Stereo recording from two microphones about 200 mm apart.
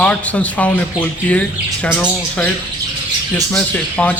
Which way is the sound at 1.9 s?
5° left (ahead or behind).